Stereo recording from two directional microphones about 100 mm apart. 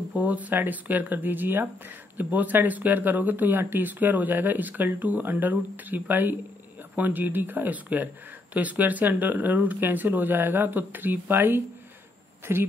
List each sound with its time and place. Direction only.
0.1 s speech: 15° right (ahead or behind)